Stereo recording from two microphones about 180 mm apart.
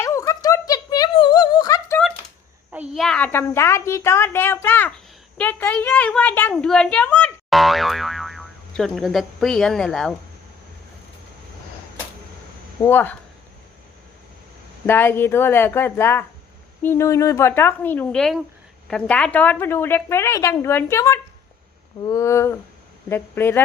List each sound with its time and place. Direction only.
0.0 s a sound: 15° left (ahead or behind)
2.7 s a woman's voice: 5° right (ahead or behind)
12.8 s a woman's voice: 10° left (ahead or behind)
14.8 s a woman's voice: 10° left (ahead or behind)